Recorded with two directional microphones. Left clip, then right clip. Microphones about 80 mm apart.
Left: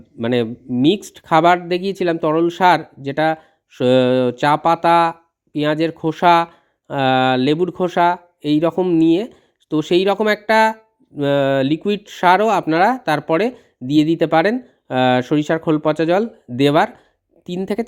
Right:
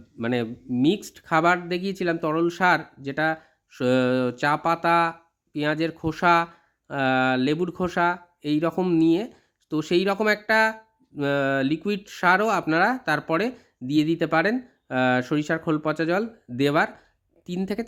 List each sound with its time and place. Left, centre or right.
0.2 s speech: left